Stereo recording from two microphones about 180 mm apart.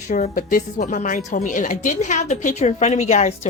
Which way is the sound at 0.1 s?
45° left (ahead or behind).